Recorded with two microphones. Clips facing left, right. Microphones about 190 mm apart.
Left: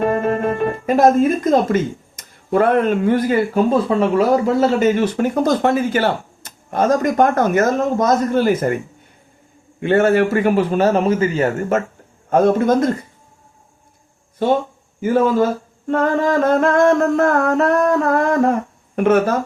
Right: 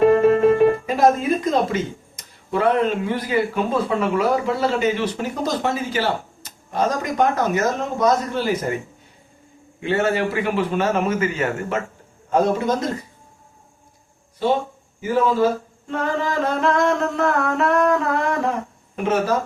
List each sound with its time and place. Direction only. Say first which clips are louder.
0.9 s speech: left 4 dB; 50° left (ahead or behind)
9.8 s a man's voice: left 6 dB; 50° left (ahead or behind); by 11.8 s 35° left (ahead or behind)
12.3 s a man's voice: left 5 dB; 55° left (ahead or behind)
15.0 s speech: left 3 dB; 50° left (ahead or behind)
18.9 s a man's voice: left 6 dB; 55° left (ahead or behind)